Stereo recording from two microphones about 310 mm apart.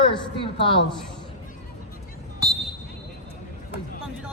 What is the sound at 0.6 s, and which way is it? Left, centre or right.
Speech, centre.